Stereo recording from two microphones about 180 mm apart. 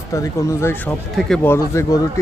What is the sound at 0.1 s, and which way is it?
Speech, 15° left (ahead or behind).